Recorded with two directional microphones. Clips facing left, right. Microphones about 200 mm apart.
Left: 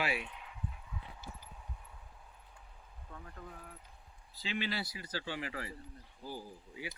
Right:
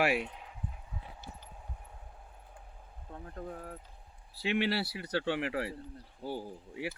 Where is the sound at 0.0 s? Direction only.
55° right (ahead or behind).